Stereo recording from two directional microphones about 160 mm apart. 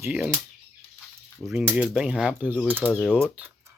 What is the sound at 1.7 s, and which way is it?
Speech, 5° right (ahead or behind).